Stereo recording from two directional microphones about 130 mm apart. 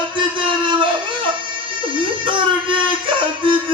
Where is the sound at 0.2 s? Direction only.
40° right (ahead or behind).